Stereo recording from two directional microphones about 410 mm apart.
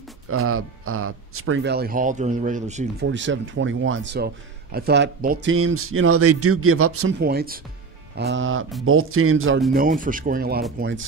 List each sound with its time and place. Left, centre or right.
0.3 s speech: right
7.2 s speech: right
9.8 s speech: centre